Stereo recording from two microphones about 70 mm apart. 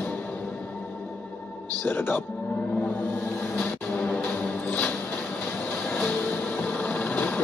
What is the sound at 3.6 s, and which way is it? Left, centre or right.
Music, left.